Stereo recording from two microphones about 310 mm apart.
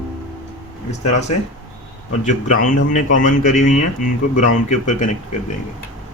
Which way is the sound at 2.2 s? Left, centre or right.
Left.